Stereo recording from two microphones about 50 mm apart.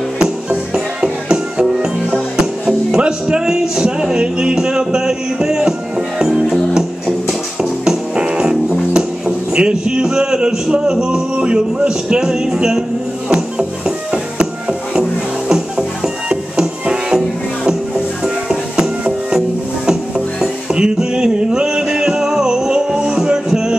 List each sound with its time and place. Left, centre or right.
0.2 s music: centre
2.3 s speech: centre
13.8 s music: centre
18.2 s music: centre